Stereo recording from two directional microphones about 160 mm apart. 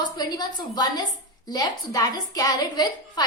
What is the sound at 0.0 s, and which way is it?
A woman's voice, 25° left (ahead or behind).